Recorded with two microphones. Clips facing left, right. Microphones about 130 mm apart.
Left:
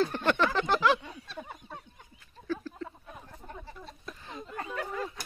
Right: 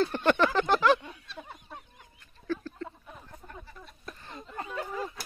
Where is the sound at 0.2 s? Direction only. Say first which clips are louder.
Right 6 dB; centre (ahead or behind).